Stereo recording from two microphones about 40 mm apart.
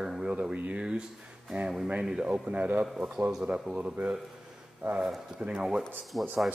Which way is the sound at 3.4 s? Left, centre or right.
Right.